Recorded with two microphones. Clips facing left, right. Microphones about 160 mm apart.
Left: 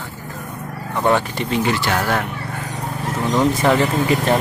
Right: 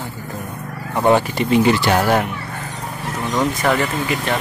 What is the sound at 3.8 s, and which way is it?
Speech, 30° left (ahead or behind).